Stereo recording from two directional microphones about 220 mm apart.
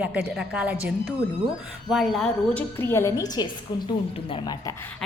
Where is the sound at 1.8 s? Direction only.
Centre (ahead or behind); by 4.7 s 20° left (ahead or behind).